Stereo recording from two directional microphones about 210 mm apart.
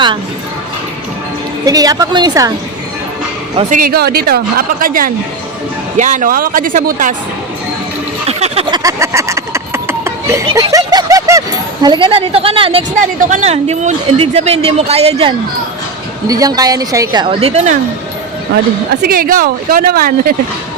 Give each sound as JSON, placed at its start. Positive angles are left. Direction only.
{"t": 1.6, "sound": "a woman's voice", "side_deg": -15}
{"t": 3.7, "sound": "a woman's voice", "side_deg": -45}
{"t": 8.3, "sound": "a sound", "side_deg": -30}
{"t": 8.8, "sound": "a sound", "side_deg": -15}
{"t": 13.0, "sound": "speech", "side_deg": -35}
{"t": 16.2, "sound": "a woman's voice", "side_deg": -15}
{"t": 19.0, "sound": "a woman's voice", "side_deg": -45}